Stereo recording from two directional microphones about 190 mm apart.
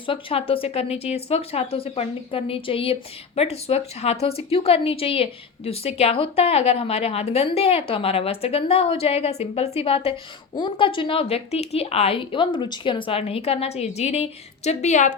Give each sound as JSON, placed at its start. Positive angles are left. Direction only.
{"t": 0.0, "sound": "a woman's voice", "side_deg": 30}